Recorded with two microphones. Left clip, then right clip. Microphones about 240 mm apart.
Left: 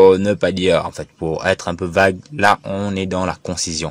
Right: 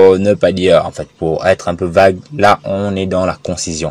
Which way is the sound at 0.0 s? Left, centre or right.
Left.